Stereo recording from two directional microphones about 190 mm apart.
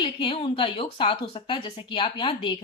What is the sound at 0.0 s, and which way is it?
A woman's voice, 25° left (ahead or behind).